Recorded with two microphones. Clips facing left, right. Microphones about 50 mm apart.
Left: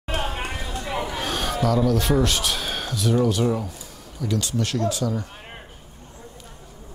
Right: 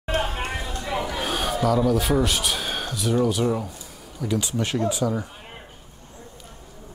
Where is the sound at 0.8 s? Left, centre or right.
Left.